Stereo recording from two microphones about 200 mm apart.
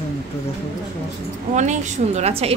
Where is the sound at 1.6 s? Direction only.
35° right (ahead or behind).